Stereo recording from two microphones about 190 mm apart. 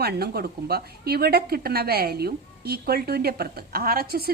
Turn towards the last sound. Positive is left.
turn(degrees=-55)  # may be behind; listen again after turning